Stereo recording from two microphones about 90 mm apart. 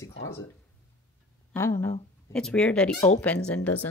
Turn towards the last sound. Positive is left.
turn(degrees=15)  # may be behind; listen again after turning